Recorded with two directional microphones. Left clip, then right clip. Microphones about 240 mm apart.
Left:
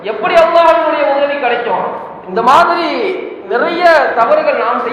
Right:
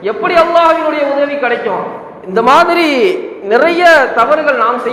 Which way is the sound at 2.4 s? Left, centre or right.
Right.